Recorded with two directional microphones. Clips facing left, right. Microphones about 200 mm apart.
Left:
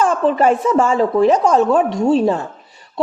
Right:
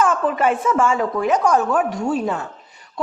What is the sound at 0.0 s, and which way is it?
A woman's voice, 30° left (ahead or behind).